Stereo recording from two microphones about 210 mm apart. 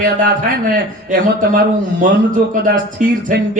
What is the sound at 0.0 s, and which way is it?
A man's voice, 40° right (ahead or behind).